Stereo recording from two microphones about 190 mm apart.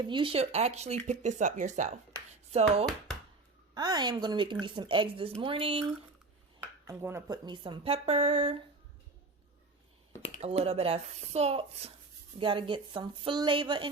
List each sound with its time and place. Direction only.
0.0 s speech: 25° right (ahead or behind)
3.8 s speech: 20° right (ahead or behind)
6.8 s speech: 15° right (ahead or behind); by 8.6 s 30° right (ahead or behind)
10.3 s speech: 30° right (ahead or behind)